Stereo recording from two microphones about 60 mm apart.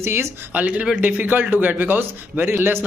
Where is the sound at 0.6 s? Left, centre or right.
Right.